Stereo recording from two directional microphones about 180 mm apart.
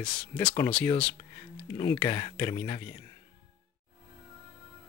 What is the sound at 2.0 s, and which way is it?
Speech, 20° left (ahead or behind).